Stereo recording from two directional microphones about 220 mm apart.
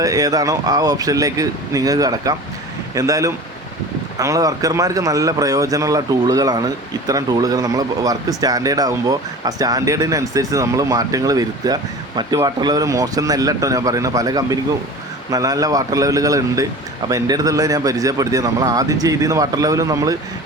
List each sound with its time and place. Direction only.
0.0 s speech: 15° right (ahead or behind)